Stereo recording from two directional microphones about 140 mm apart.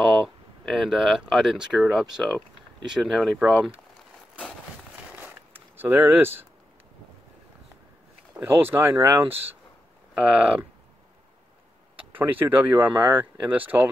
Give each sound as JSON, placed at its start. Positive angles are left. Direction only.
{"t": 0.7, "sound": "speech", "side_deg": 0}
{"t": 5.1, "sound": "a sound", "side_deg": -15}
{"t": 8.5, "sound": "speech", "side_deg": -15}
{"t": 12.1, "sound": "speech", "side_deg": -15}